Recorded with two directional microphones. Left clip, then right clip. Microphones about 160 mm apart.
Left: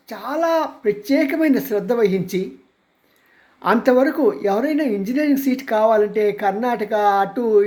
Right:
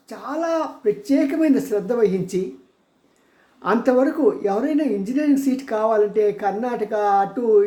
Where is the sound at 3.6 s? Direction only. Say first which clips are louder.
Left 2 dB; 15° left (ahead or behind).